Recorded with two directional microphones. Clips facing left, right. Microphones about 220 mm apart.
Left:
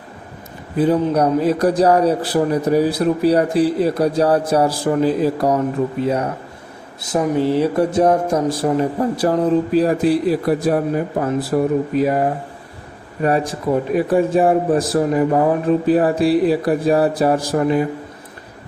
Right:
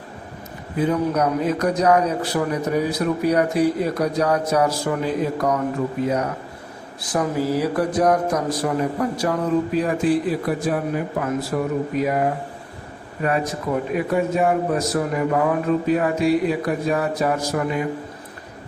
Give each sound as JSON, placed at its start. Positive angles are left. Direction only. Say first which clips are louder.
{"t": 0.8, "sound": "speech", "louder": "left 4 dB", "side_deg": 35}
{"t": 6.0, "sound": "a sound", "louder": "left 3 dB", "side_deg": 30}
{"t": 13.2, "sound": "speech", "louder": "left 5 dB", "side_deg": 30}